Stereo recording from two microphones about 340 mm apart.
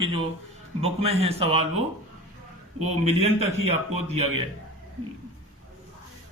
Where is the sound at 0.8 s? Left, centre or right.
Centre.